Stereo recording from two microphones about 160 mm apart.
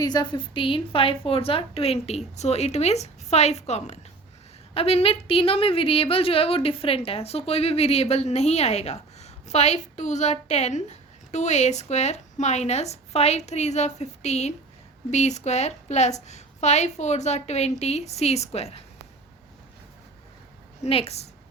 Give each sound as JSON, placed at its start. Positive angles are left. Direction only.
{"t": 0.0, "sound": "a woman's voice", "side_deg": 25}
{"t": 20.8, "sound": "a woman's voice", "side_deg": 40}